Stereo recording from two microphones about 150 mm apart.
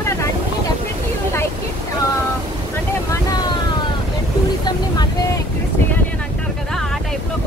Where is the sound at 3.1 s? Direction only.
25° left (ahead or behind).